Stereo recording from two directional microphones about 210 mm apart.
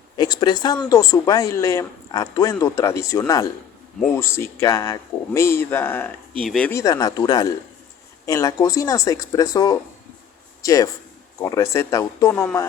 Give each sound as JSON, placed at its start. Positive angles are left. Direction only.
{"t": 0.2, "sound": "speech", "side_deg": 20}
{"t": 6.7, "sound": "speech", "side_deg": 15}